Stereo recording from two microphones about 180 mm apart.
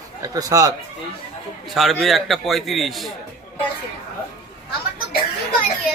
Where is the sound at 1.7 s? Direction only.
Centre (ahead or behind).